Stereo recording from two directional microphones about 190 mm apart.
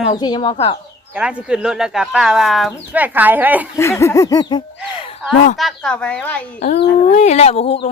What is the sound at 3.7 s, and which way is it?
Speech, 15° left (ahead or behind).